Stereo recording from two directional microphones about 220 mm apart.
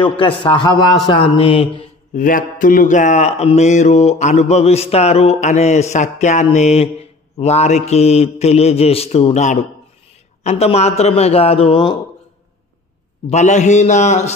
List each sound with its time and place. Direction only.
0.2 s a man's voice: 25° left (ahead or behind)
2.1 s a man's voice: 40° left (ahead or behind); by 12.0 s 20° left (ahead or behind)
13.3 s speech: 30° left (ahead or behind)